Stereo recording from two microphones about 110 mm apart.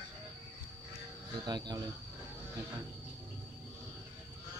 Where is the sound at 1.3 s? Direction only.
40° right (ahead or behind).